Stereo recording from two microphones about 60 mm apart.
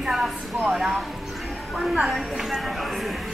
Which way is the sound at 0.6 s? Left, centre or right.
Centre.